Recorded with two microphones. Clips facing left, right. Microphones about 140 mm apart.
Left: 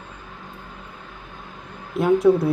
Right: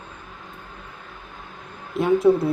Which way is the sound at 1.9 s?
Centre (ahead or behind).